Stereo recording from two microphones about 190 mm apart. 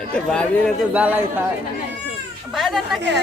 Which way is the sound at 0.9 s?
10° right (ahead or behind).